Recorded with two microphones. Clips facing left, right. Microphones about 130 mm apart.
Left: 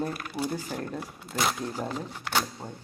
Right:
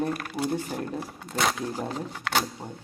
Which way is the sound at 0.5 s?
20° right (ahead or behind).